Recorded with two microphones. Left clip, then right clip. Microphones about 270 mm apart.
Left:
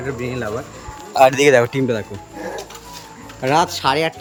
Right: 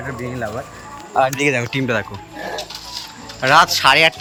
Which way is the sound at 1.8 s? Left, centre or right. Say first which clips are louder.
Right 1 dB; centre.